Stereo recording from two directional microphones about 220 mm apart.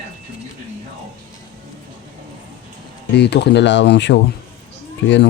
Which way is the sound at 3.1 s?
50° left (ahead or behind).